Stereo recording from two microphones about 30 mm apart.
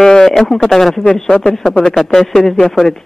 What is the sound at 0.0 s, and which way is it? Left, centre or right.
Speech, centre.